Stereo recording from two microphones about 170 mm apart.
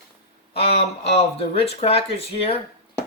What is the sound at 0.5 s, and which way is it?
Speech, 35° left (ahead or behind).